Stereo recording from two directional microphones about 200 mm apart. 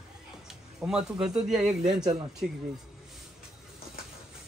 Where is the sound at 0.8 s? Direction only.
5° right (ahead or behind).